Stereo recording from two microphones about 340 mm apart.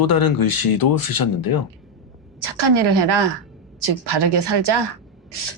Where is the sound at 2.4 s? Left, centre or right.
Right.